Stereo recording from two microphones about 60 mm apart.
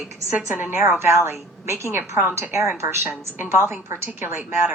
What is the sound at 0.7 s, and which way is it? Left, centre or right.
A woman's voice, right.